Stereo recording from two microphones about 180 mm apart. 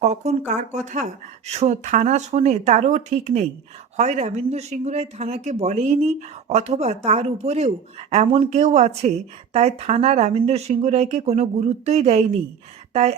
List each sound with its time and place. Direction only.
0.0 s speech: 40° right (ahead or behind)